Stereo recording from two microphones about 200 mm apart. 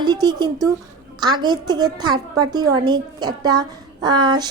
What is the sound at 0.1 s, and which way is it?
A woman's voice, 20° right (ahead or behind).